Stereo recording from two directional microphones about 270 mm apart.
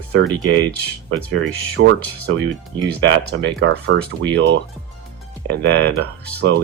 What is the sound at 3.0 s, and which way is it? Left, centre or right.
Speech, right.